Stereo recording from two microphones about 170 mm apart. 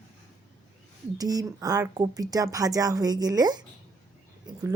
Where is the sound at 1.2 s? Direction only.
20° right (ahead or behind).